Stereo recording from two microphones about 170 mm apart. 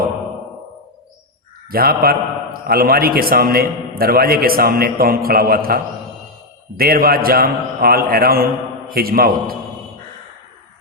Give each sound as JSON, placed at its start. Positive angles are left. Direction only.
{"t": 1.7, "sound": "a man's voice", "side_deg": -60}